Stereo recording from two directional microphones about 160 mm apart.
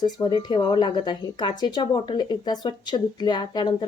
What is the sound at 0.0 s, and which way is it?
Speech, 25° left (ahead or behind).